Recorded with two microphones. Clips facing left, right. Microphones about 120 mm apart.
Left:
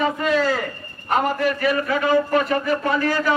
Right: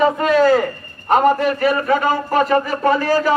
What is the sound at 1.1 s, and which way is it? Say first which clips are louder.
A man's voice: right 6 dB; 35° right (ahead or behind).